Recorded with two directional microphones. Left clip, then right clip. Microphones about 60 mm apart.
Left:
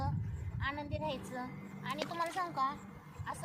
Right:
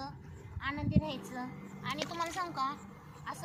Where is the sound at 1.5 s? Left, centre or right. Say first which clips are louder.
Right 1 dB; centre.